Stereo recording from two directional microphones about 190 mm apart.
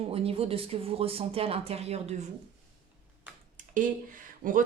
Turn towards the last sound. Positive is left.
turn(degrees=-45)  # may be behind; listen again after turning